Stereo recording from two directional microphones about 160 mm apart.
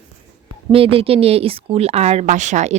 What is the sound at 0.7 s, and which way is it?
Speech, 35° right (ahead or behind).